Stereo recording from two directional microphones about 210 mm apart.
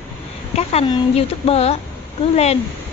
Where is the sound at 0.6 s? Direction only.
30° left (ahead or behind).